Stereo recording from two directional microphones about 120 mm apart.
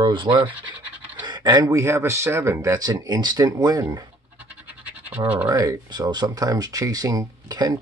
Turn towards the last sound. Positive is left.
turn(degrees=-30)  # may be behind; listen again after turning